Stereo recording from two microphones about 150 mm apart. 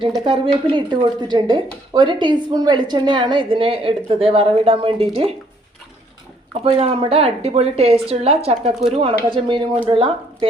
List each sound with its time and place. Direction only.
0.3 s speech: 35° right (ahead or behind)
6.7 s speech: 40° right (ahead or behind)